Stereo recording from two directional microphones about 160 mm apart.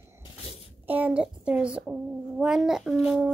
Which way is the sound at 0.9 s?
10° right (ahead or behind).